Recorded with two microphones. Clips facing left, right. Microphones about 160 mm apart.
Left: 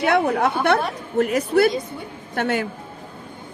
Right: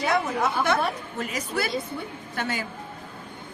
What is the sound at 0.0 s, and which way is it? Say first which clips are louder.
A woman's voice: left 6 dB; 70° left (ahead or behind).